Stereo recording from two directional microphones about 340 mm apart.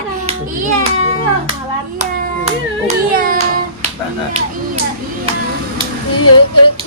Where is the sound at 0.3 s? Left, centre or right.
Centre.